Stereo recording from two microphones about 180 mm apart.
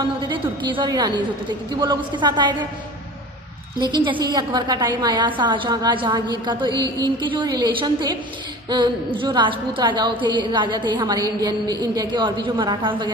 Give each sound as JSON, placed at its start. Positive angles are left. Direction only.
{"t": 0.3, "sound": "a woman's voice", "side_deg": -25}
{"t": 3.7, "sound": "a woman's voice", "side_deg": -25}